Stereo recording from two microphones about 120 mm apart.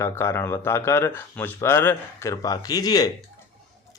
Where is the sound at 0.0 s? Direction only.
20° left (ahead or behind).